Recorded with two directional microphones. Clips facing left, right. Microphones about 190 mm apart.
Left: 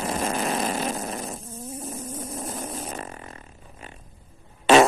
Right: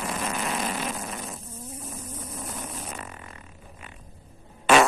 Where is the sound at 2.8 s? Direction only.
40° left (ahead or behind).